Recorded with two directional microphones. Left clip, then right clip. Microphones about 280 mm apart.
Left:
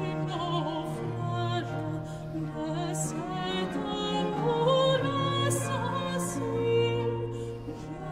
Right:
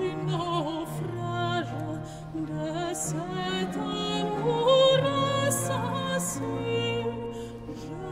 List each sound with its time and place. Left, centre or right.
0.0 s music: centre
2.6 s music: centre